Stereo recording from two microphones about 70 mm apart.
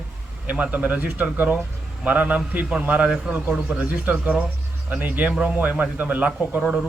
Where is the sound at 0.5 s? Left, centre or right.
Right.